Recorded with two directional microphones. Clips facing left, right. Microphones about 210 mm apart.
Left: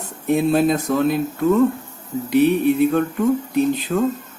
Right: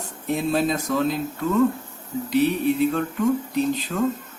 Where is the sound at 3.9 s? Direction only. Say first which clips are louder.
Left 5 dB; 40° left (ahead or behind).